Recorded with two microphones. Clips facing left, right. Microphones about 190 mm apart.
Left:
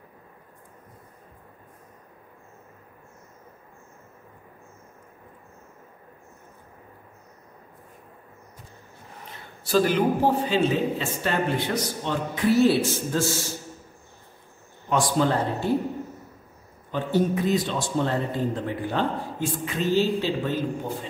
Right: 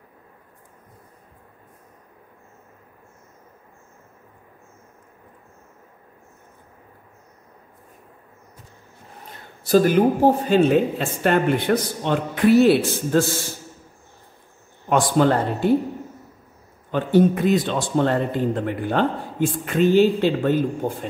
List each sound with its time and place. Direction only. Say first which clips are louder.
9.7 s speech: right 5 dB; 45° right (ahead or behind); by 13.2 s 65° right (ahead or behind)
14.9 s speech: right 5 dB; 60° right (ahead or behind)
16.9 s speech: right 6 dB; 60° right (ahead or behind)